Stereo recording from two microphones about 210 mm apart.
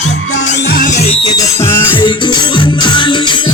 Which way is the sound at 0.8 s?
35° left (ahead or behind).